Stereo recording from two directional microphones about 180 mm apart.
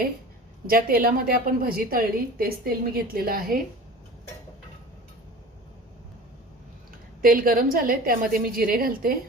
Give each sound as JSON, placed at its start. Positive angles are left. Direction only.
{"t": 0.7, "sound": "a woman's voice", "side_deg": -55}
{"t": 7.2, "sound": "a woman's voice", "side_deg": -55}